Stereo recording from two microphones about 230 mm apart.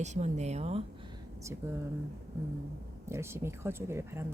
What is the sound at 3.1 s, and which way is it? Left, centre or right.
Speech, centre.